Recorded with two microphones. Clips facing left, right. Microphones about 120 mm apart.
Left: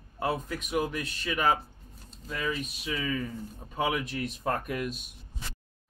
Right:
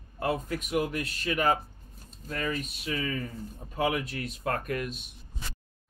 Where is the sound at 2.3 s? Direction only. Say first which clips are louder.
Even; 45° right (ahead or behind).